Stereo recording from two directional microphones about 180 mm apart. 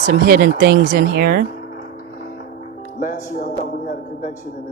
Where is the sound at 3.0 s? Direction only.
45° left (ahead or behind).